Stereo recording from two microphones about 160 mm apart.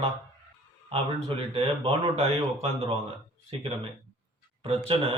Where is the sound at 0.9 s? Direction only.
35° right (ahead or behind).